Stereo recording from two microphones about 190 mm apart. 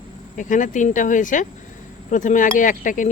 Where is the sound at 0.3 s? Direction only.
40° left (ahead or behind).